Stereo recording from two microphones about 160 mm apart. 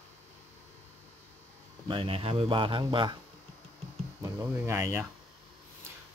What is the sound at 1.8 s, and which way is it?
Speech, 35° right (ahead or behind).